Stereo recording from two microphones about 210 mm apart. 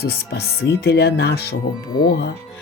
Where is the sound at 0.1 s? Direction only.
50° left (ahead or behind).